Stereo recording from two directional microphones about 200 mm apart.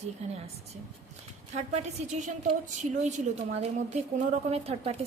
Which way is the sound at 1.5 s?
35° right (ahead or behind).